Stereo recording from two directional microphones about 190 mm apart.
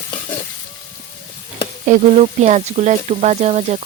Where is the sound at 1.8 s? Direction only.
40° right (ahead or behind).